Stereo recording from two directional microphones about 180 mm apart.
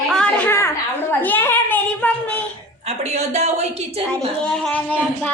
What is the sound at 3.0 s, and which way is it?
Speech, 35° right (ahead or behind).